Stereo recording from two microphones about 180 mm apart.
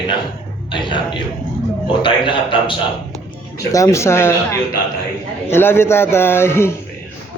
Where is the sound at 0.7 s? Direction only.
25° left (ahead or behind).